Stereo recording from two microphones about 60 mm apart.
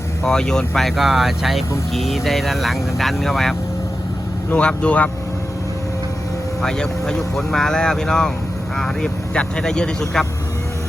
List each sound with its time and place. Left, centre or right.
0.3 s speech: centre
4.5 s speech: centre
6.6 s speech: centre